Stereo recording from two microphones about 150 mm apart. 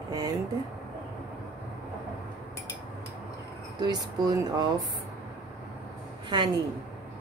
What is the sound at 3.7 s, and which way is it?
Speech, 30° right (ahead or behind).